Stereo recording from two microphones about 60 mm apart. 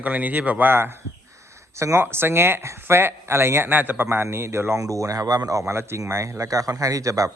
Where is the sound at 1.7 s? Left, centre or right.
Right.